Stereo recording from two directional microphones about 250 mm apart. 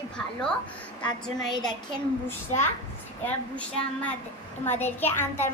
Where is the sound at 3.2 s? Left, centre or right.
Centre.